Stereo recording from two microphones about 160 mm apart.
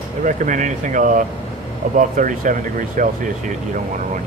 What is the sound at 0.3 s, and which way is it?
Speech, 50° right (ahead or behind).